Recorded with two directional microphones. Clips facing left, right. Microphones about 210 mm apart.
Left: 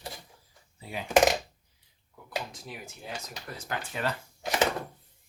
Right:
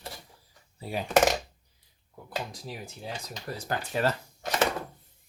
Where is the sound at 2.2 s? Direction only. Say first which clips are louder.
Right 1 dB; 35° right (ahead or behind).